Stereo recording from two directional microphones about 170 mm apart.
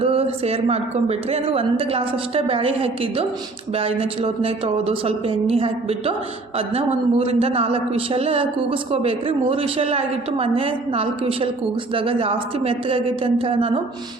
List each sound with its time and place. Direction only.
0.0 s a man's voice: 35° right (ahead or behind)